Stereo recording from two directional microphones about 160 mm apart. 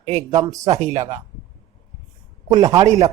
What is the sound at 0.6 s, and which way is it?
Speech, 45° right (ahead or behind).